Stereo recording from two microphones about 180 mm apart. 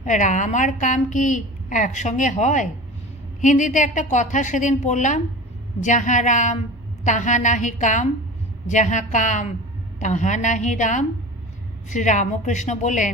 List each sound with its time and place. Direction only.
0.0 s a woman's voice: 45° left (ahead or behind)